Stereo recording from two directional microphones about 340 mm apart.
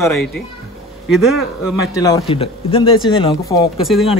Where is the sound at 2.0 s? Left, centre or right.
Centre.